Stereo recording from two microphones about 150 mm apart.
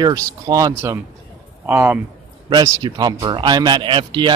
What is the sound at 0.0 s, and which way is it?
Speech, 25° right (ahead or behind).